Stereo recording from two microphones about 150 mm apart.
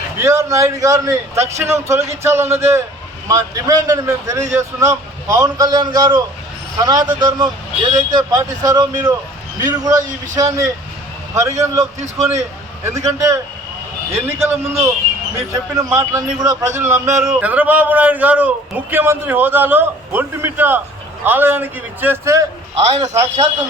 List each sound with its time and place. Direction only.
0.2 s a man's voice: 20° right (ahead or behind)
12.8 s a man's voice: 20° right (ahead or behind)
17.4 s a man's voice: 10° right (ahead or behind)